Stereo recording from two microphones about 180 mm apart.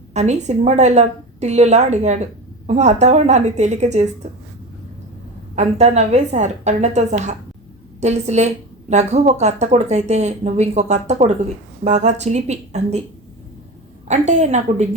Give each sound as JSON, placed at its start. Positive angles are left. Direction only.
{"t": 0.1, "sound": "speech", "side_deg": -40}
{"t": 5.5, "sound": "speech", "side_deg": -35}
{"t": 14.1, "sound": "speech", "side_deg": -40}